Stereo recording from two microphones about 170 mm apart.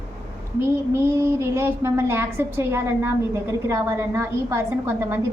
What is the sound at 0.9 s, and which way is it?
A woman's voice, 15° right (ahead or behind).